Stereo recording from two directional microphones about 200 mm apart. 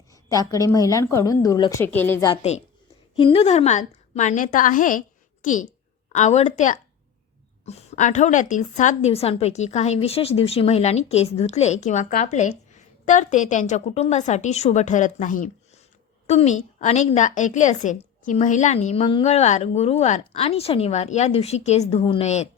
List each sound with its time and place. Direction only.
0.1 s a woman's voice: 15° left (ahead or behind)
2.2 s a woman's voice: 30° left (ahead or behind)